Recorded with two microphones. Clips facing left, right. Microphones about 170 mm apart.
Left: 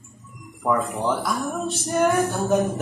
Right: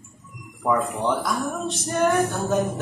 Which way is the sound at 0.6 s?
Centre (ahead or behind).